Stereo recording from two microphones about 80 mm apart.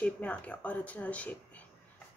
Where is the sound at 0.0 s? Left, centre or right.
Centre.